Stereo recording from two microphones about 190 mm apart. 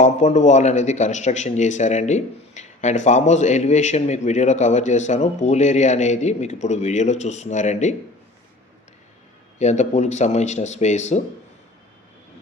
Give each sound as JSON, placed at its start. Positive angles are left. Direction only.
{"t": 0.0, "sound": "speech", "side_deg": 40}
{"t": 9.6, "sound": "speech", "side_deg": 35}